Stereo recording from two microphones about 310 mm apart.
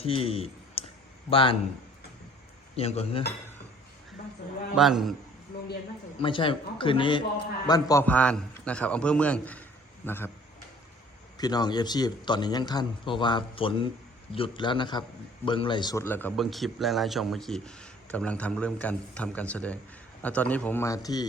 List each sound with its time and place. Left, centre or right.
0.0 s a man's voice: centre
2.7 s speech: centre
4.7 s a man's voice: centre
6.1 s a man's voice: centre
11.3 s a man's voice: centre